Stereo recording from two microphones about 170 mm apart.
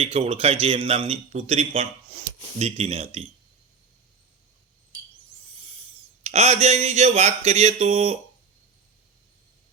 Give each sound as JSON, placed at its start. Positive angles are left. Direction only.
{"t": 0.0, "sound": "speech", "side_deg": -40}
{"t": 6.2, "sound": "speech", "side_deg": -40}